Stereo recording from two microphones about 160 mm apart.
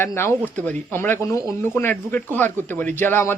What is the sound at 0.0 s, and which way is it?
Speech, 15° left (ahead or behind).